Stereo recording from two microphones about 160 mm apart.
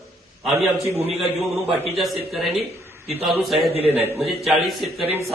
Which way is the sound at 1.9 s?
Centre (ahead or behind).